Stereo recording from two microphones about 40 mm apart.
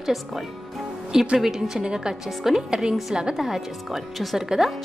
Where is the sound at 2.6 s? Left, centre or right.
Centre.